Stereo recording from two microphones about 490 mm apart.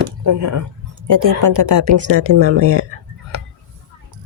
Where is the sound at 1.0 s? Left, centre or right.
Right.